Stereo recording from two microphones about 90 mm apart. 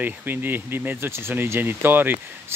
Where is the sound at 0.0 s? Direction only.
20° right (ahead or behind).